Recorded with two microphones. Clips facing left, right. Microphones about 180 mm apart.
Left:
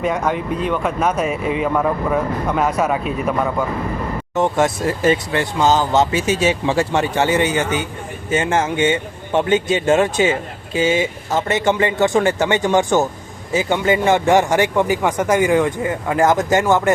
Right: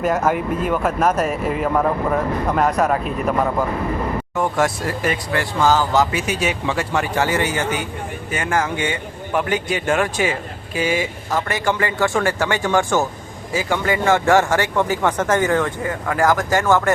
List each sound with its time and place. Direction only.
0.0 s speech: 5° right (ahead or behind)
4.4 s speech: 25° left (ahead or behind)